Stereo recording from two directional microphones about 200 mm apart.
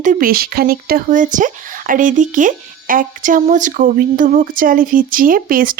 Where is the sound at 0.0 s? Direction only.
40° right (ahead or behind).